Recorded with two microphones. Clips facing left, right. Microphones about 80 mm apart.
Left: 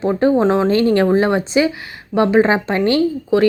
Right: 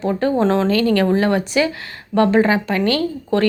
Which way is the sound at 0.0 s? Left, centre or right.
Left.